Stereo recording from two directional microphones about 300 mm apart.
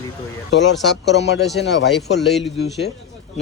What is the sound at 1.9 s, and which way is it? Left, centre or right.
Speech, centre.